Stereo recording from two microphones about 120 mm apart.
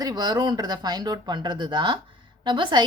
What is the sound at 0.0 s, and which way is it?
A woman's voice, 35° right (ahead or behind).